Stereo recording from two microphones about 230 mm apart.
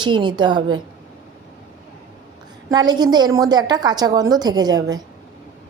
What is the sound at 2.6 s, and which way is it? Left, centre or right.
A woman's voice, centre.